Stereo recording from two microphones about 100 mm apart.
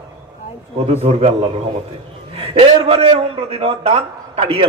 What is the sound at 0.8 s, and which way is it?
Speech, 90° right.